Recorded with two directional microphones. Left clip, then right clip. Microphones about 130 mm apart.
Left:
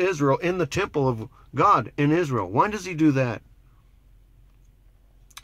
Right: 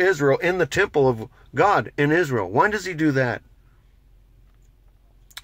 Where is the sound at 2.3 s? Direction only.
5° left (ahead or behind).